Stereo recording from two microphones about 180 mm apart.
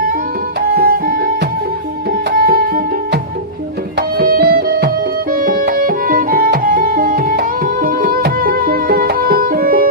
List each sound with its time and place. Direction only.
0.7 s music: 60° right (ahead or behind)
2.3 s music: 55° right (ahead or behind)